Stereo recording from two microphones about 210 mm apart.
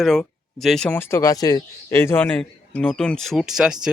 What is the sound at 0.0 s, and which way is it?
Speech, centre (ahead or behind).